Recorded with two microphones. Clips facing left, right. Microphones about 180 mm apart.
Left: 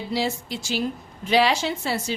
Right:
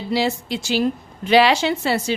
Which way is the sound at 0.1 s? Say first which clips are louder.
Right 6 dB; 70° right (ahead or behind).